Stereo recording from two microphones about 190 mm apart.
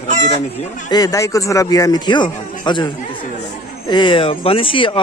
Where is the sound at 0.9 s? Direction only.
20° left (ahead or behind).